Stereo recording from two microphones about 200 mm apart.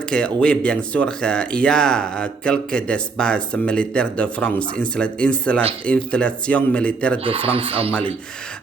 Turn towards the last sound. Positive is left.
turn(degrees=-25)  # may be behind; listen again after turning